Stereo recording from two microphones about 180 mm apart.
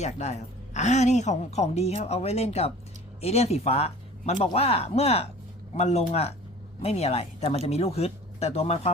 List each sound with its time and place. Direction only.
0.0 s a woman's voice: 40° left (ahead or behind)